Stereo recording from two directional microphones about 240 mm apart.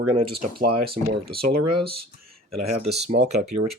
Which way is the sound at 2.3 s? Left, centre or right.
Right.